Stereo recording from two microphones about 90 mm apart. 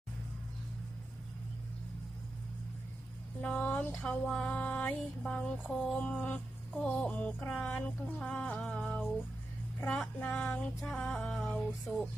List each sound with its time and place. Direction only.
3.4 s speech: 15° left (ahead or behind)
4.0 s music: 10° left (ahead or behind)
10.2 s speech: 20° left (ahead or behind)
10.5 s music: 10° left (ahead or behind)